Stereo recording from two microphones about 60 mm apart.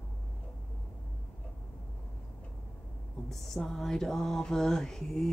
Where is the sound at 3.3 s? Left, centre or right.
Centre.